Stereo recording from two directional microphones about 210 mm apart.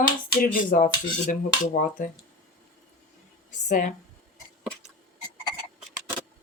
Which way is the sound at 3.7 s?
35° left (ahead or behind).